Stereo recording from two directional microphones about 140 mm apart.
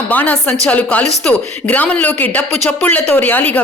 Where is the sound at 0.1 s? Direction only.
10° left (ahead or behind).